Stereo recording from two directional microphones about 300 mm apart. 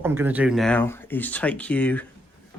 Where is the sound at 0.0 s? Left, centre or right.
Centre.